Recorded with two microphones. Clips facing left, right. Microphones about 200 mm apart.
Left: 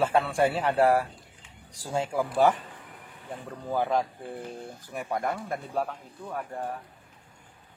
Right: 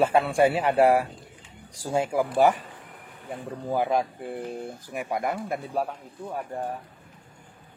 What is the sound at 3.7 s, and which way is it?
Speech, 15° right (ahead or behind).